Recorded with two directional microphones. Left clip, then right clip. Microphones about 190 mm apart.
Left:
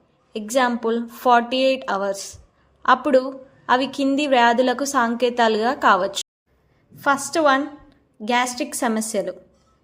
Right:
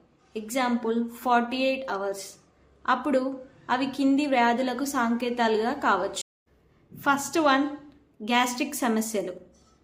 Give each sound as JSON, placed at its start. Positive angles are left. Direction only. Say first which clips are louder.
{"t": 0.3, "sound": "a woman's voice", "louder": "left 7 dB", "side_deg": 35}
{"t": 7.9, "sound": "a sound", "louder": "left 6 dB", "side_deg": 30}
{"t": 8.5, "sound": "a woman's voice", "louder": "left 4 dB", "side_deg": 30}